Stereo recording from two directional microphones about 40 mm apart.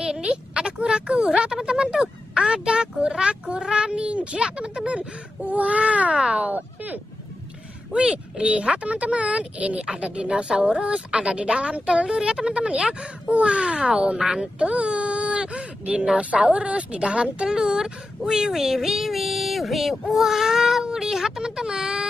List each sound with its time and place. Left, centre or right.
0.0 s a sound: right
1.5 s speech: right
6.1 s speech: centre
6.5 s speech: right
7.9 s speech: right
14.1 s speech: centre
14.6 s speech: right